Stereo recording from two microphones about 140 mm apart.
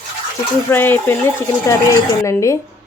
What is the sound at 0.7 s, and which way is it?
A woman's voice, 15° left (ahead or behind).